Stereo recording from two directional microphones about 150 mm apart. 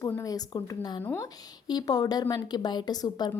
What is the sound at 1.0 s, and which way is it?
Speech, 15° left (ahead or behind).